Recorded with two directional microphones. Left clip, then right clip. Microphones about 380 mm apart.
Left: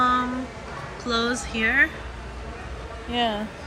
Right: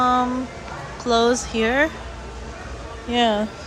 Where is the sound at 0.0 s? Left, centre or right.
Centre.